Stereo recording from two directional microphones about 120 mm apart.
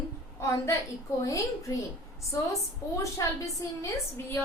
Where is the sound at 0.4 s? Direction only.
25° left (ahead or behind).